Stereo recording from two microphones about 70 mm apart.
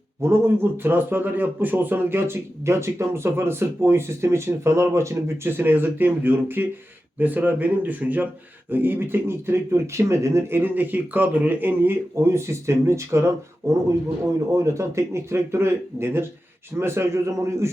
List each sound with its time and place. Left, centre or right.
0.2 s speech: right
10.6 s speech: right